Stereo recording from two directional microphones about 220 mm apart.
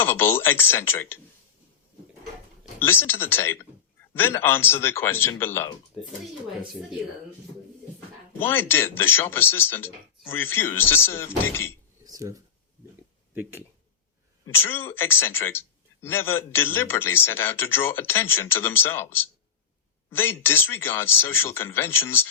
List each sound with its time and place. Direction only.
0.0 s a man's voice: 10° left (ahead or behind)
2.7 s a man's voice: 10° left (ahead or behind)
8.4 s a man's voice: 10° left (ahead or behind)
12.0 s dishes: 15° right (ahead or behind)
13.3 s speech: 10° right (ahead or behind)
14.4 s a man's voice: 10° left (ahead or behind)